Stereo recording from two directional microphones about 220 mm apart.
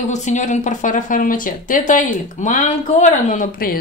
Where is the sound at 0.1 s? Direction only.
35° left (ahead or behind).